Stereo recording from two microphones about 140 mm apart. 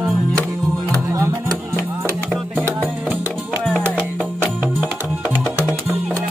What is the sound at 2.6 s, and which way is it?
Music, 15° right (ahead or behind).